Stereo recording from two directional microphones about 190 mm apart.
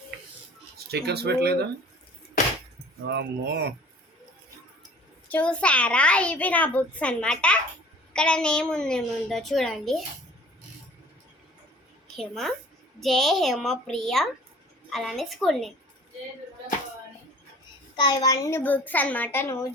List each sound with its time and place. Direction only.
0.9 s speech: 60° right (ahead or behind)
3.1 s speech: 65° right (ahead or behind)
5.3 s a woman's voice: 5° left (ahead or behind)
12.1 s a child's voice: centre (ahead or behind)
17.9 s a woman's voice: 20° left (ahead or behind)